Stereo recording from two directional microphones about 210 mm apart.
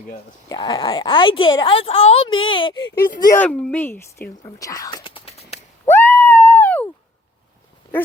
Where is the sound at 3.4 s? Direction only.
5° left (ahead or behind); by 5.5 s 30° left (ahead or behind).